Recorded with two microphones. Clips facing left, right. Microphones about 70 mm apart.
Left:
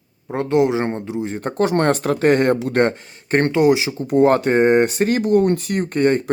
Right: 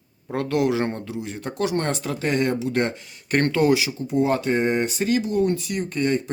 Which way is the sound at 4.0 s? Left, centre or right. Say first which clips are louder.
Left 7 dB; left.